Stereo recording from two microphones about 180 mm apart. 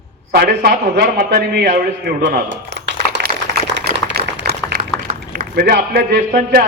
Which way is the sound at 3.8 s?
60° right (ahead or behind).